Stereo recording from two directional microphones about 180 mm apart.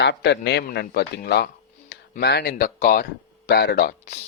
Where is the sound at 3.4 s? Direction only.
65° left (ahead or behind).